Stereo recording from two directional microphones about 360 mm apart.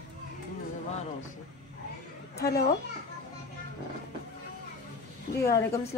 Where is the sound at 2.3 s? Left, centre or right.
Left.